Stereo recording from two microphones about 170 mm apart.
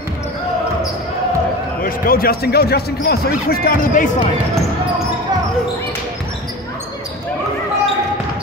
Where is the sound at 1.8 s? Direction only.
60° left (ahead or behind).